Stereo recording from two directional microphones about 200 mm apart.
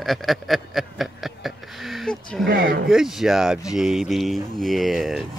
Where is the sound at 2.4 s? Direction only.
45° right (ahead or behind).